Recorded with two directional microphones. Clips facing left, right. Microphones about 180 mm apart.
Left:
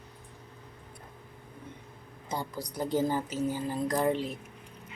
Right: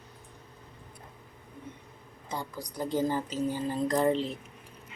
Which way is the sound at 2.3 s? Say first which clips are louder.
Left 1 dB; 10° left (ahead or behind).